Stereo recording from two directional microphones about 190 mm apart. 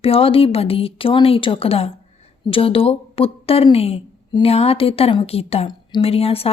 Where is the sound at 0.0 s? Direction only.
30° left (ahead or behind).